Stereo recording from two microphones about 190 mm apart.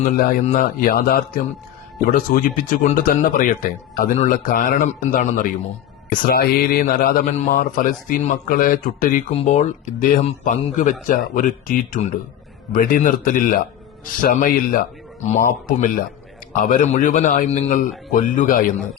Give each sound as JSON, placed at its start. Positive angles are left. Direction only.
{"t": 0.0, "sound": "speech", "side_deg": 50}